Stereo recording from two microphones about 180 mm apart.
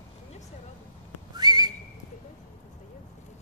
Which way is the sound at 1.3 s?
25° right (ahead or behind).